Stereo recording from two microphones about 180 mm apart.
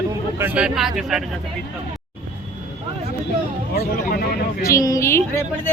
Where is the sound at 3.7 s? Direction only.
55° left (ahead or behind).